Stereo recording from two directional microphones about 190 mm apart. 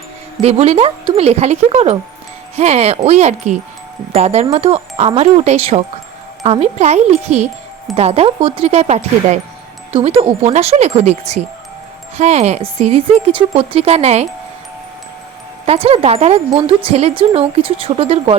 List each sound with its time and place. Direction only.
0.4 s speech: 30° right (ahead or behind)
15.6 s speech: 30° right (ahead or behind)